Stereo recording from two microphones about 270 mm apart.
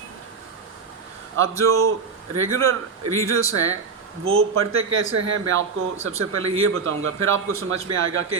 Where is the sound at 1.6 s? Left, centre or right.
Right.